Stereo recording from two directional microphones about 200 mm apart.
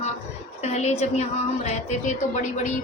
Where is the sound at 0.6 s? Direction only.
35° left (ahead or behind).